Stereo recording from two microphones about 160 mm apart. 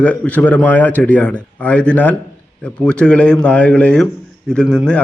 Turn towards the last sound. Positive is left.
turn(degrees=5)  # may be behind; listen again after turning